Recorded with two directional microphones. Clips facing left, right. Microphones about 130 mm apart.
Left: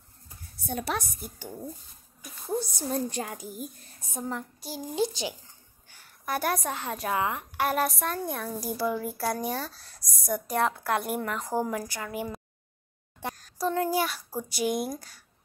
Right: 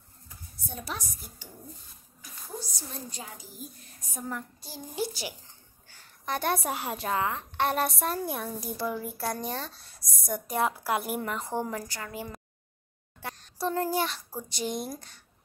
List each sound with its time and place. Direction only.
0.7 s a woman's voice: 65° left (ahead or behind)
2.6 s a woman's voice: 55° left (ahead or behind)
4.0 s a woman's voice: 25° left (ahead or behind)
5.9 s a sound: 10° left (ahead or behind)
6.7 s a woman's voice: 10° right (ahead or behind)
7.2 s a woman's voice: 15° left (ahead or behind)
7.6 s a child's voice: centre (ahead or behind)
13.2 s a sound: 20° left (ahead or behind)
13.6 s a child's voice: centre (ahead or behind)